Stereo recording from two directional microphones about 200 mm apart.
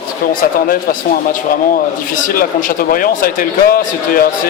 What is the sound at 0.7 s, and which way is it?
Speech, 45° left (ahead or behind).